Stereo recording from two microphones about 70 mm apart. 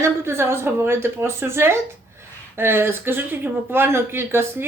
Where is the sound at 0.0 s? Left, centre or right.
Right.